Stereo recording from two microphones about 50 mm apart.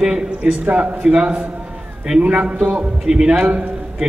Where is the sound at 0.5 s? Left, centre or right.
Right.